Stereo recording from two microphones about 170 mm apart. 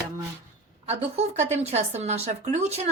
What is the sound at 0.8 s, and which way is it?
Speech, 40° right (ahead or behind).